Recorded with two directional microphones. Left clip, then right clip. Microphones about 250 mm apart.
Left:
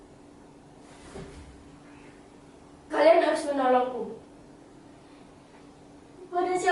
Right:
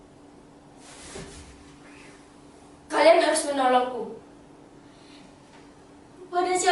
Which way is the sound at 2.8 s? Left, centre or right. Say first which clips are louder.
Right 2 dB; centre.